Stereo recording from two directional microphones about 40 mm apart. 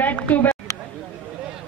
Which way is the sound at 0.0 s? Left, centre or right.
Left.